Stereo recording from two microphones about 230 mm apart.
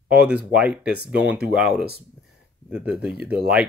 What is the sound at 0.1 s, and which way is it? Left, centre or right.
Speech, centre.